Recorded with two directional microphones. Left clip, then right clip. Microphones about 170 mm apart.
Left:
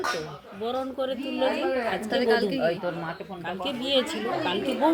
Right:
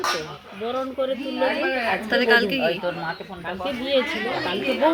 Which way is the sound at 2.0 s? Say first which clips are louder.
Right 6 dB; 25° right (ahead or behind).